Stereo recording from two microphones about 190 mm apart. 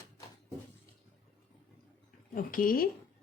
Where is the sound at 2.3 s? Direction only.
45° left (ahead or behind).